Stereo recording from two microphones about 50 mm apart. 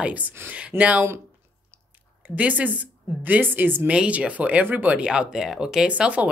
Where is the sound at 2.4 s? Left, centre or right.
Right.